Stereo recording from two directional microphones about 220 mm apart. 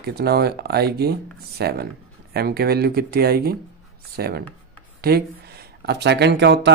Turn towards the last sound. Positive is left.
turn(degrees=-50)  # may be behind; listen again after turning